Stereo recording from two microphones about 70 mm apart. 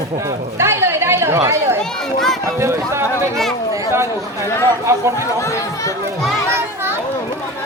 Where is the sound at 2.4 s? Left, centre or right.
Right.